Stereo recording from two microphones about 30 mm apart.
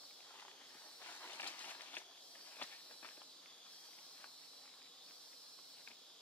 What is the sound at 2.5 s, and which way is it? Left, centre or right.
Walk, left.